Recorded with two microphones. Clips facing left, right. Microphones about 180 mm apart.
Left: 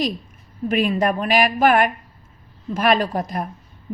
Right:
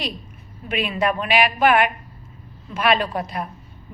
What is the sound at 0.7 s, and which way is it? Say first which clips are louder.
A woman's voice: left 3 dB; 40° left (ahead or behind).